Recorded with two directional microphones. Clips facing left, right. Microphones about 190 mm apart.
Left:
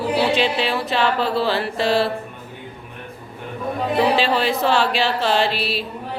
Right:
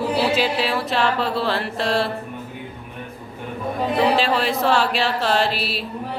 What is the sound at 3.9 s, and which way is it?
Music, centre (ahead or behind).